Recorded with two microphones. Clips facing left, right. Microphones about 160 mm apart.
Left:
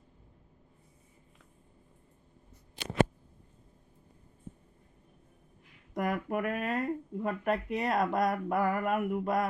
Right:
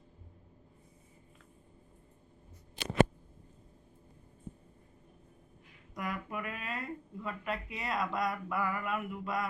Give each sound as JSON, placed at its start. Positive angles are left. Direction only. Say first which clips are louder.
{"t": 5.9, "sound": "speech", "louder": "left 7 dB", "side_deg": 50}